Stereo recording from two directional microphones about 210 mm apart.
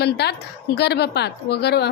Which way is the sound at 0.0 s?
50° left (ahead or behind).